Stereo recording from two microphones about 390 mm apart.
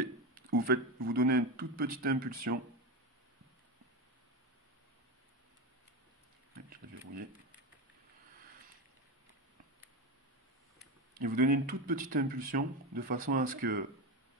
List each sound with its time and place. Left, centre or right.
0.0 s speech: right
11.2 s speech: right